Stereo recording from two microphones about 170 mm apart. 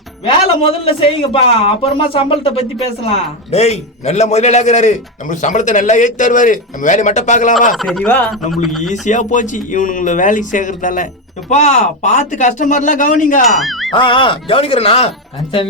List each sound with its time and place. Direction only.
0.3 s a man's voice: 35° left (ahead or behind)
7.8 s speech: centre (ahead or behind)
8.9 s a man's voice: 45° left (ahead or behind)
13.6 s music: centre (ahead or behind)
13.9 s speech: 30° left (ahead or behind)